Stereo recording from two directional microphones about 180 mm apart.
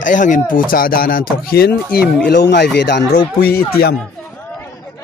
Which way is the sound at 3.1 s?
55° left (ahead or behind).